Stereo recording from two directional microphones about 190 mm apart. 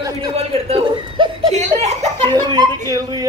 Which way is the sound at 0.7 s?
30° right (ahead or behind).